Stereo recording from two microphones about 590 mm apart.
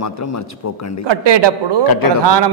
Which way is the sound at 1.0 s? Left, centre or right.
Right.